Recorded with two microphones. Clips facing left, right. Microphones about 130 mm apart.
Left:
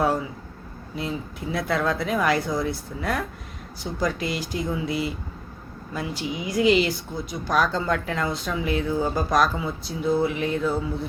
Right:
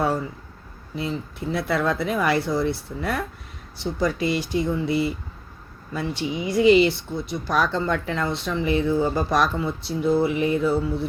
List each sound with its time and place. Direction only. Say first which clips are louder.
0.0 s speech: left 1 dB; centre (ahead or behind)